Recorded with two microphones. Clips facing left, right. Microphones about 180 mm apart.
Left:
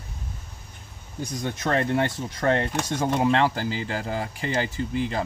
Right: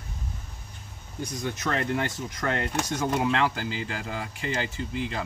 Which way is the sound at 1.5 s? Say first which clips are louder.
Left 5 dB; 30° left (ahead or behind).